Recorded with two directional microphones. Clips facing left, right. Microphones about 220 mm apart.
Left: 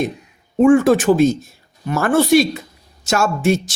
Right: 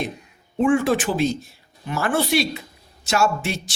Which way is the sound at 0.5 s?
45° left (ahead or behind).